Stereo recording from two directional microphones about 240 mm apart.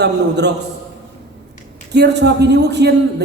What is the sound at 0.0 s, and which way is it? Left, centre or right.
Speech, right.